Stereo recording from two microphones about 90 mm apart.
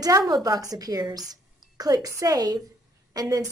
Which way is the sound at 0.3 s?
45° right (ahead or behind).